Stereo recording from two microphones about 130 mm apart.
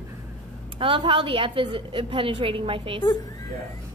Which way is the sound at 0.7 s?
45° right (ahead or behind).